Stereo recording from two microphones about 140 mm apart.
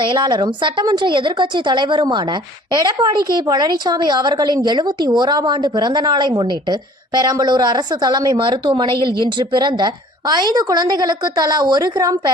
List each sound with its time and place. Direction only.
0.0 s a woman's voice: 35° right (ahead or behind)